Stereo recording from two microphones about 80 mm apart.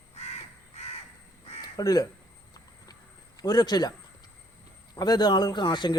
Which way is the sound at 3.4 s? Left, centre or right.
Left.